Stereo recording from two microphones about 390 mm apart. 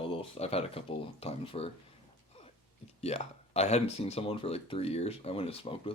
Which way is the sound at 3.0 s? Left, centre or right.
Centre.